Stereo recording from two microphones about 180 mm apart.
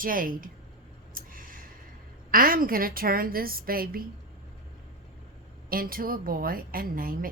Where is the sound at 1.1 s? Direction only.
50° right (ahead or behind).